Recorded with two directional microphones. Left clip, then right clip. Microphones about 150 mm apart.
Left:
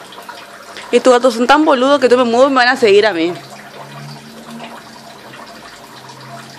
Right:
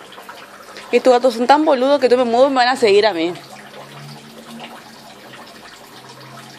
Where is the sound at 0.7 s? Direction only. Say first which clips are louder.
Left 3 dB; 10° left (ahead or behind).